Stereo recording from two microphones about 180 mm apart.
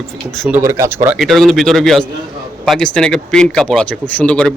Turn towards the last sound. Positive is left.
turn(degrees=5)  # may be behind; listen again after turning